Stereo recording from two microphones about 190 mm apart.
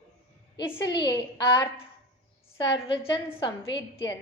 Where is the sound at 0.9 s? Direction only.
20° left (ahead or behind).